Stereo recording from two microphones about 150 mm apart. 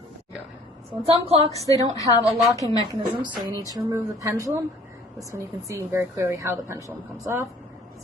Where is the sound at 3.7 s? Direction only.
20° right (ahead or behind).